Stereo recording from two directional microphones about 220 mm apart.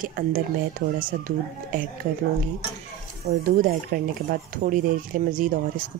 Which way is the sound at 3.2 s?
35° right (ahead or behind).